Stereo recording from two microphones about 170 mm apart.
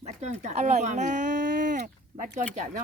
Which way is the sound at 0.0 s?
40° right (ahead or behind).